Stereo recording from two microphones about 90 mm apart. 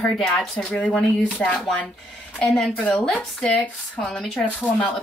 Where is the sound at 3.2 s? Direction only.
10° left (ahead or behind).